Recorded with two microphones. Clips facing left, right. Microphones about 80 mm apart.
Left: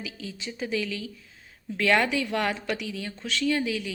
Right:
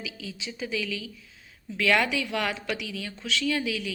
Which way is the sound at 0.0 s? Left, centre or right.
Left.